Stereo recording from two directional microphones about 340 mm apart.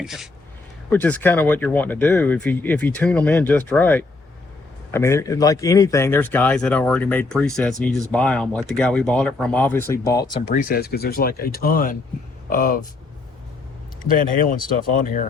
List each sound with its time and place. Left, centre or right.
0.0 s a man's voice: centre; by 12.8 s left
14.0 s speech: left